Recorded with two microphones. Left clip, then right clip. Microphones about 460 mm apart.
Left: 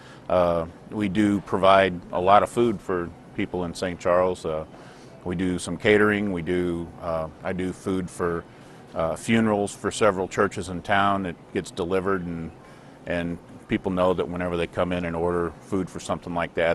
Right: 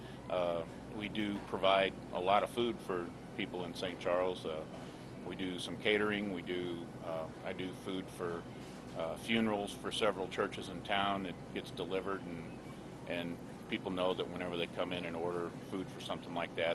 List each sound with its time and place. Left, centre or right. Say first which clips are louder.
0.3 s speech: left 14 dB; left